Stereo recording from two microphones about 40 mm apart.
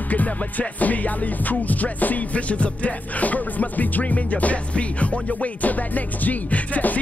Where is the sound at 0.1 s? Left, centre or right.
Left.